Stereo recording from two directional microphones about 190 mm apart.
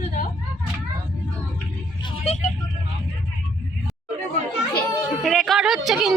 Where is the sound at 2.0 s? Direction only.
35° left (ahead or behind).